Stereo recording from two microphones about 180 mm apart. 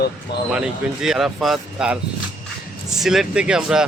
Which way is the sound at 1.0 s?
Centre (ahead or behind).